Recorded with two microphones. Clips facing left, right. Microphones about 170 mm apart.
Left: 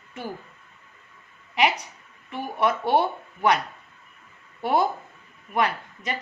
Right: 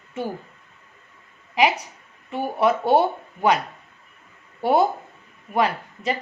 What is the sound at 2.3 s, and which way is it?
Speech, 30° right (ahead or behind).